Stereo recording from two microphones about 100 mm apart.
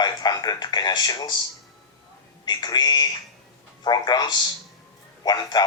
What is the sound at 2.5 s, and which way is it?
Speech, 45° left (ahead or behind).